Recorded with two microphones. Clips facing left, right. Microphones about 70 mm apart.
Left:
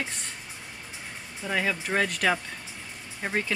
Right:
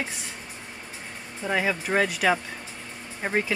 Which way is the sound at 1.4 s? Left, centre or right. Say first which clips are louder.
Right 3 dB; centre.